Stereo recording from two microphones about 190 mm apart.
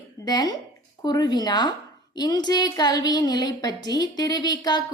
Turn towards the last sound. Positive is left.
turn(degrees=20)  # may be behind; listen again after turning